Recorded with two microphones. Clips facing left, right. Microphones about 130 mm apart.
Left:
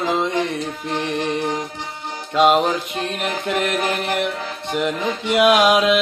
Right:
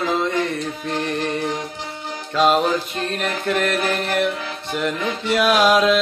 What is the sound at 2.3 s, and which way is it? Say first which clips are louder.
Music: left 1 dB; 10° left (ahead or behind).